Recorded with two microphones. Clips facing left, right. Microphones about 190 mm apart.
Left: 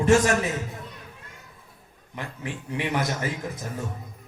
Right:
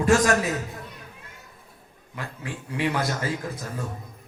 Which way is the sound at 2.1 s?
20° left (ahead or behind).